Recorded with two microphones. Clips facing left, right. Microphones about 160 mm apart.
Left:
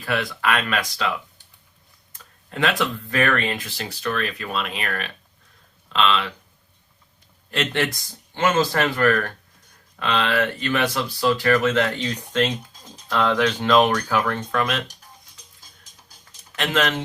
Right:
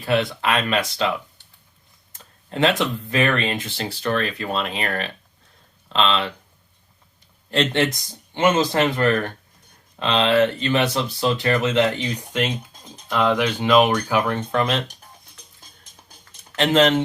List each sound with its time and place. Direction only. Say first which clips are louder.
0.0 s speech: right 3 dB; 25° right (ahead or behind)
2.1 s speech: right 4 dB; 30° right (ahead or behind)
7.5 s speech: right 4 dB; 30° right (ahead or behind)
16.6 s speech: right 6 dB; 25° right (ahead or behind)